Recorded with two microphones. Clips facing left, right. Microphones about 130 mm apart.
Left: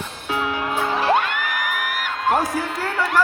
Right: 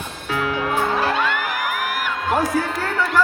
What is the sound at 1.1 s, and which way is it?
Music, 55° left (ahead or behind).